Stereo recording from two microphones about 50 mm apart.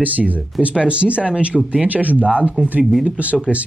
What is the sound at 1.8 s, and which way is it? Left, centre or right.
Speech, right.